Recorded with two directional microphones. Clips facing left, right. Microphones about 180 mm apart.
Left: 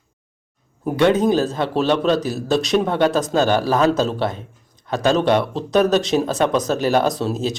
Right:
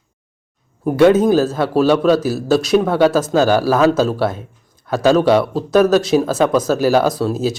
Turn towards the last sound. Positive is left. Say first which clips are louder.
# right 3 dB
turn(degrees=0)  # may be behind; listen again after turning